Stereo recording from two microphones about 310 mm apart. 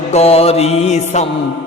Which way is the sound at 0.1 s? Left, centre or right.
Centre.